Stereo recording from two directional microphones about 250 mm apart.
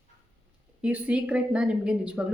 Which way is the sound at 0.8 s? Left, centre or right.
Centre.